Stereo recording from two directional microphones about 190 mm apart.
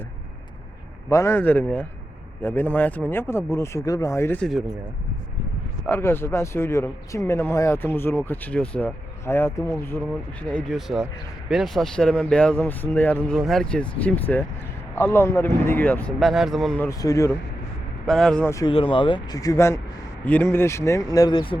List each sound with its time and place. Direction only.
1.1 s speech: 15° left (ahead or behind)
5.9 s speech: 10° left (ahead or behind)
10.5 s speech: 5° left (ahead or behind)
17.0 s speech: 15° left (ahead or behind)
18.0 s speech: centre (ahead or behind)
18.5 s speech: 25° left (ahead or behind)